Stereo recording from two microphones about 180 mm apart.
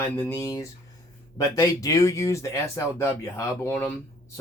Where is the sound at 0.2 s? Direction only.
15° left (ahead or behind).